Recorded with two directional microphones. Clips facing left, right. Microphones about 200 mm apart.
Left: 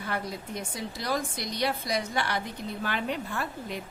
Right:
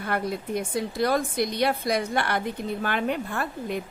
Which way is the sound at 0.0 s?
55° right (ahead or behind).